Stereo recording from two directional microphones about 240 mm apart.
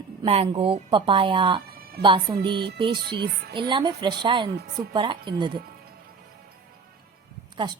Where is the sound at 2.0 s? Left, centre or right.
Centre.